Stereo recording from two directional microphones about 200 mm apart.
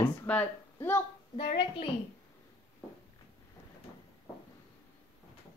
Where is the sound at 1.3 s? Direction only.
25° left (ahead or behind).